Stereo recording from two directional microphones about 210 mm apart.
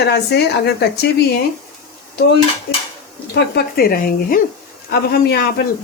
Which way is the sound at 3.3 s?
45° left (ahead or behind).